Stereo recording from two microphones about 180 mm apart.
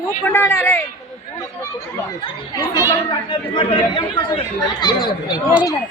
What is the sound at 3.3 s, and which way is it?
Speech, 30° left (ahead or behind).